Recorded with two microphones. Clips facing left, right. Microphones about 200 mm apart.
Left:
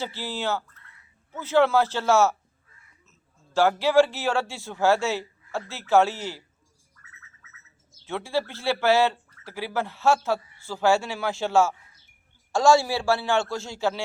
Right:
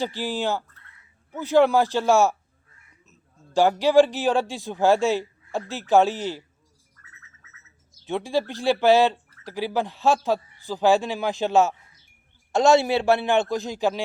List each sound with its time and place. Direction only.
0.0 s a man's voice: 15° right (ahead or behind)
8.0 s a man's voice: 15° right (ahead or behind)